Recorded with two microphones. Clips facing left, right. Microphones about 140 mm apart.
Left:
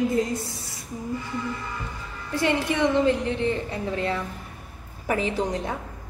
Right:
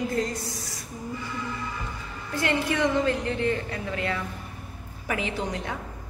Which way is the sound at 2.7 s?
20° left (ahead or behind).